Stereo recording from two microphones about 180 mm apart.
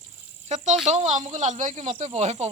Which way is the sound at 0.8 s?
40° right (ahead or behind).